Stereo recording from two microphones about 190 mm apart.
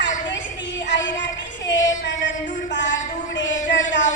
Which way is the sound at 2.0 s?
70° left (ahead or behind).